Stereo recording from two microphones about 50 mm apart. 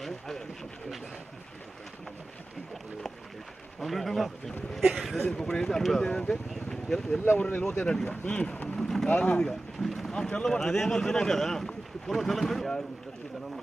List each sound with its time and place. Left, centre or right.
3.8 s a man's voice: centre
5.2 s speech: centre
6.0 s speech: centre
6.5 s a sound: centre
7.3 s speech: left
7.8 s speech: centre
8.7 s vehicle: centre
9.1 s speech: centre